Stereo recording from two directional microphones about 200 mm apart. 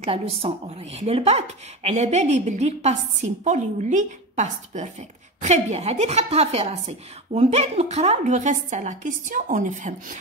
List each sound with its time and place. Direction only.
0.0 s a woman's voice: 30° right (ahead or behind)